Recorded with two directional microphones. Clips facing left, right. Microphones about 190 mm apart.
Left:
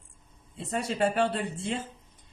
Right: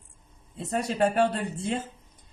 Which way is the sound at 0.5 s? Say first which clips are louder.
Right 2 dB; 40° right (ahead or behind).